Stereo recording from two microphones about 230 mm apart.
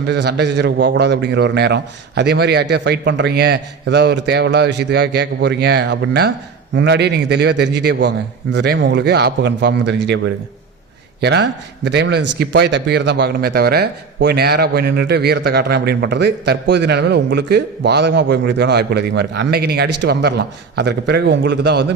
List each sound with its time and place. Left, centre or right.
0.1 s a man's voice: right